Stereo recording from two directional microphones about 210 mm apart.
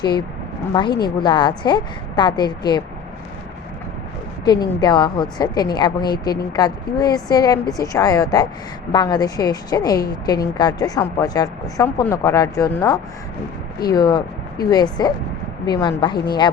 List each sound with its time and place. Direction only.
0.0 s a woman's voice: 20° left (ahead or behind)
4.4 s a woman's voice: 20° left (ahead or behind)